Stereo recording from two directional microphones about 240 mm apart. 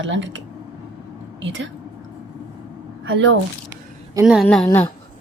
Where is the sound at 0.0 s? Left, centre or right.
Right.